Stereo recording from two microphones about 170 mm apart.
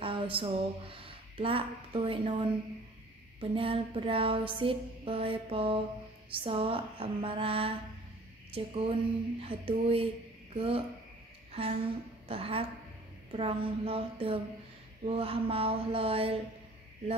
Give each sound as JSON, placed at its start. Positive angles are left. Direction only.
{"t": 0.0, "sound": "a woman's voice", "side_deg": -30}
{"t": 3.3, "sound": "music", "side_deg": -30}
{"t": 8.5, "sound": "speech", "side_deg": -35}
{"t": 9.4, "sound": "music", "side_deg": -35}
{"t": 10.5, "sound": "a woman's voice", "side_deg": -35}
{"t": 12.3, "sound": "music", "side_deg": -35}